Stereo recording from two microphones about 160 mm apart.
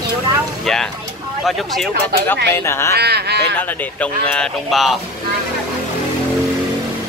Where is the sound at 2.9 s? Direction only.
90° right.